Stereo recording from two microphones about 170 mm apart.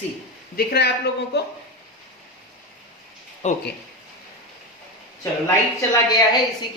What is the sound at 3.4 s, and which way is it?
Speech, 40° left (ahead or behind).